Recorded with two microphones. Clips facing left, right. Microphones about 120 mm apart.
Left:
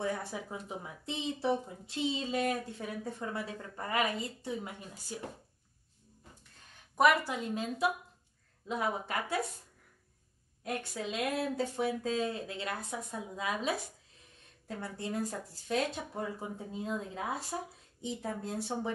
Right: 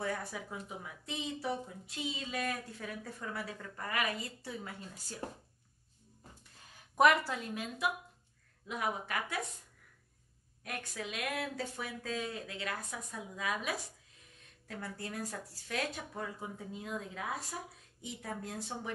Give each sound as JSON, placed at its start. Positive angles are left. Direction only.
{"t": 0.0, "sound": "speech", "side_deg": 25}
{"t": 7.2, "sound": "speech", "side_deg": 20}
{"t": 8.6, "sound": "speech", "side_deg": 30}
{"t": 10.6, "sound": "speech", "side_deg": 30}